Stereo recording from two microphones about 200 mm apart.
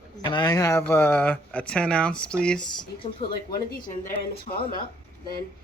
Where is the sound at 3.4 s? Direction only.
45° left (ahead or behind).